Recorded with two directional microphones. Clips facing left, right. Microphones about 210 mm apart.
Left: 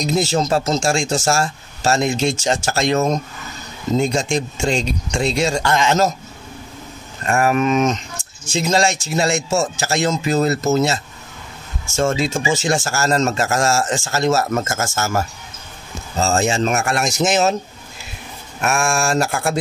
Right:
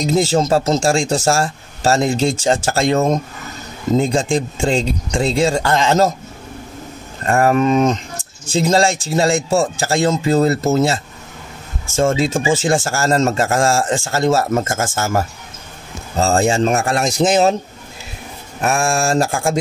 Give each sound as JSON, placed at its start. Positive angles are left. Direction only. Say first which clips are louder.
{"t": 0.0, "sound": "a man's voice", "louder": "right 3 dB", "side_deg": -30}
{"t": 7.2, "sound": "a man's voice", "louder": "right 3 dB", "side_deg": -35}
{"t": 12.4, "sound": "a man's voice", "louder": "right 3 dB", "side_deg": -30}
{"t": 18.6, "sound": "a man's voice", "louder": "right 2 dB", "side_deg": -35}